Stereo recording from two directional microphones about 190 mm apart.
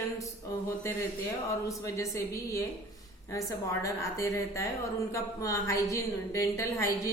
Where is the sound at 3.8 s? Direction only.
15° left (ahead or behind).